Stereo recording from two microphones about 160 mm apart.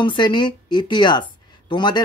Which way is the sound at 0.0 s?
30° left (ahead or behind).